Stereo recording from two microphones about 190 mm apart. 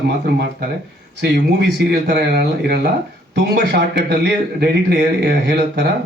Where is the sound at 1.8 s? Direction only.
60° right (ahead or behind).